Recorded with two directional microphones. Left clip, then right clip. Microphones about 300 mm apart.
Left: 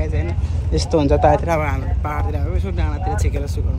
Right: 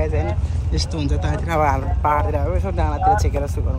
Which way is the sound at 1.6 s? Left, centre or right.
Centre.